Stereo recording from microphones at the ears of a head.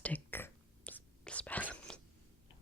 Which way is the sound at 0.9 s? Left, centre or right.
Centre.